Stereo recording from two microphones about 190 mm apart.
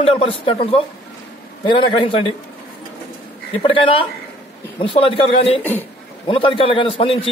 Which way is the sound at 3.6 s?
25° left (ahead or behind).